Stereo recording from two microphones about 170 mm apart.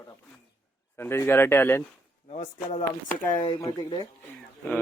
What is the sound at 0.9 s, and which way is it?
Speech, 15° left (ahead or behind).